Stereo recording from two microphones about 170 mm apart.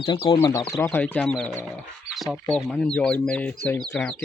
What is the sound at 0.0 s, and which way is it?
Speech, 30° left (ahead or behind).